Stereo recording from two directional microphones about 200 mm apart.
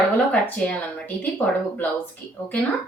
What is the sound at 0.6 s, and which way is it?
A woman's voice, 5° left (ahead or behind).